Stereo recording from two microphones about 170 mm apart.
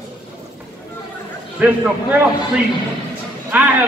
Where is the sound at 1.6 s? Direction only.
10° right (ahead or behind).